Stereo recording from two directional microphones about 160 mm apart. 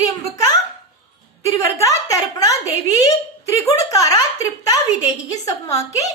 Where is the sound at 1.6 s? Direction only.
20° left (ahead or behind).